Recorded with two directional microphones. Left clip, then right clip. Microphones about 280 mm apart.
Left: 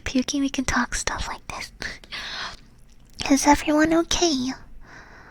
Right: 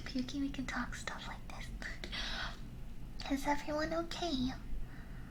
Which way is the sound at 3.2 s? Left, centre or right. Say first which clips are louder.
Left 18 dB; left.